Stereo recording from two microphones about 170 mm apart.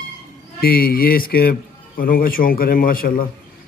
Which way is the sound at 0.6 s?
60° left (ahead or behind).